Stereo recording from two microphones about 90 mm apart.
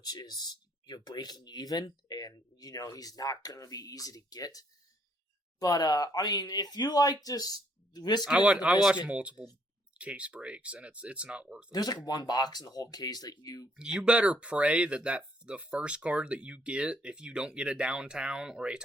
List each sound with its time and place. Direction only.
0.0 s speech: 45° left (ahead or behind)
8.2 s speech: 5° right (ahead or behind)
11.7 s speech: 45° left (ahead or behind)
13.7 s speech: 10° right (ahead or behind)